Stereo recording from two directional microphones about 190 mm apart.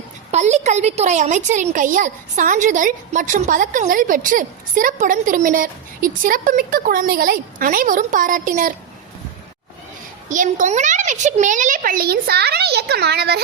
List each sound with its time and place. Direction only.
0.3 s a woman's voice: 35° right (ahead or behind)
10.2 s a woman's voice: 40° right (ahead or behind); by 13.4 s 60° right (ahead or behind)